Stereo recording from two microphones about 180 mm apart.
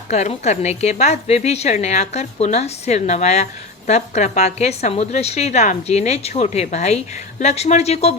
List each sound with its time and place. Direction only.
0.1 s a woman's voice: 40° left (ahead or behind)